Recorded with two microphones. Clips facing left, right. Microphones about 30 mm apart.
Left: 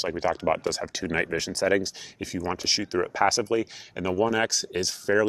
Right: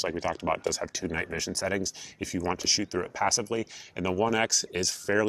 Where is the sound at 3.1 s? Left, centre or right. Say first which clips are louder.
Left 5 dB; left.